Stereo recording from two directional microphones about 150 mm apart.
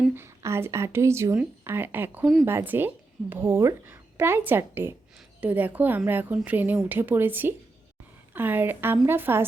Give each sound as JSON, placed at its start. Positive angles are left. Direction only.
{"t": 0.0, "sound": "speech", "side_deg": -15}